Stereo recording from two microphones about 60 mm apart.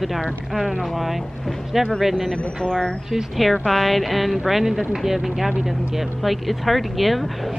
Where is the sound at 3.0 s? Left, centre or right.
Centre.